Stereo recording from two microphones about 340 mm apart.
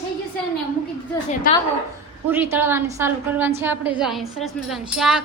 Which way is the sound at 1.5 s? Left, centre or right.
Left.